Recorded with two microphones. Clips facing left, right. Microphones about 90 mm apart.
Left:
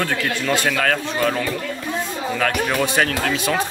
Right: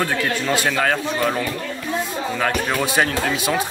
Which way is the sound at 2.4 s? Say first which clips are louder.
Left 1 dB; 15° right (ahead or behind).